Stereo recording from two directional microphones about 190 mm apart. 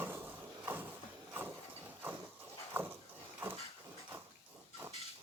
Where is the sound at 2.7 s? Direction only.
10° right (ahead or behind).